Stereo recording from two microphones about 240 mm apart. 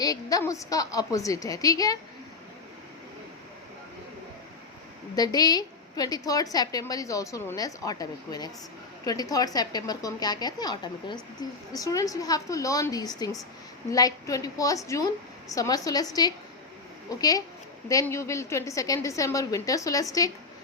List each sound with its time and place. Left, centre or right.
0.0 s a woman's voice: centre
5.1 s a woman's voice: centre
17.1 s a woman's voice: centre